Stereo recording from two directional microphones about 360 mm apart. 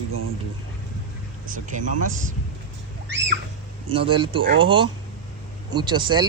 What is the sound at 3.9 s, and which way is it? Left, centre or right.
Speech, centre.